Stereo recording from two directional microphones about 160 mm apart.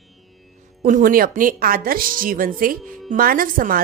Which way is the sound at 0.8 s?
60° right (ahead or behind).